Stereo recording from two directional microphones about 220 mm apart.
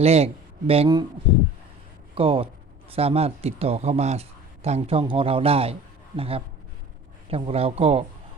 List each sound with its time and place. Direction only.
0.0 s a man's voice: 30° right (ahead or behind)
2.1 s a man's voice: 25° right (ahead or behind)